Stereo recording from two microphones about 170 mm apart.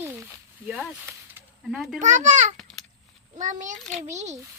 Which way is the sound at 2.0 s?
45° right (ahead or behind).